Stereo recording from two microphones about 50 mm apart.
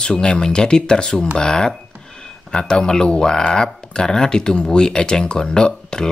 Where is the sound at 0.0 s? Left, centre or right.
Centre.